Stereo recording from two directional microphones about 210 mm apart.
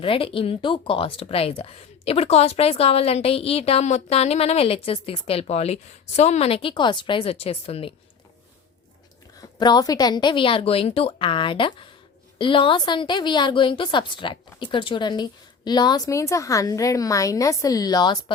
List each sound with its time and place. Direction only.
0.0 s speech: 25° left (ahead or behind)
9.4 s speech: 20° left (ahead or behind)